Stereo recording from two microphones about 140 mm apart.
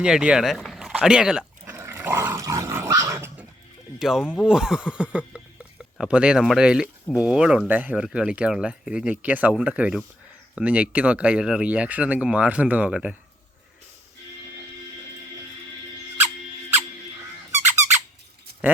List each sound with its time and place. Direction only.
0.0 s speech: 5° right (ahead or behind)
1.6 s dog: 20° right (ahead or behind)
3.9 s speech: 5° right (ahead or behind)